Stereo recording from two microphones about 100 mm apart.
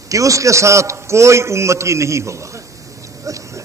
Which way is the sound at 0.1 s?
35° right (ahead or behind).